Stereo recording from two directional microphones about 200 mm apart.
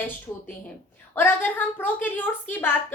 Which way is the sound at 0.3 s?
15° left (ahead or behind).